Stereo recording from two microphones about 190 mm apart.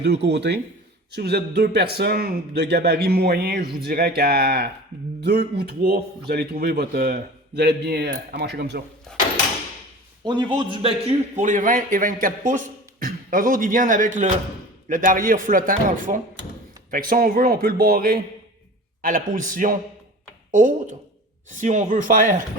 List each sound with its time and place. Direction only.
0.0 s speech: 60° right (ahead or behind)
9.1 s speech: 5° left (ahead or behind)
10.2 s a man's voice: 25° right (ahead or behind); by 22.4 s 45° right (ahead or behind)